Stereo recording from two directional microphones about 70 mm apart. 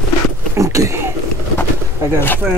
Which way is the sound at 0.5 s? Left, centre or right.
Right.